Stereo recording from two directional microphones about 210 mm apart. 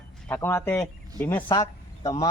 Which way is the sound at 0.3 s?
10° left (ahead or behind).